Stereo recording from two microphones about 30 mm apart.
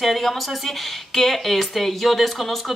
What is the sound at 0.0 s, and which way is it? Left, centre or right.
Speech, centre.